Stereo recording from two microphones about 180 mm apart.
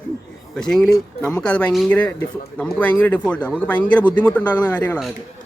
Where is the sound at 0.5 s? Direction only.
5° left (ahead or behind).